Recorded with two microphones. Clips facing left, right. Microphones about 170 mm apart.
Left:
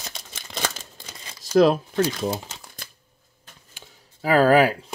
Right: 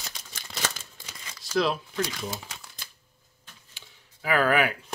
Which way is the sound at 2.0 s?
30° left (ahead or behind).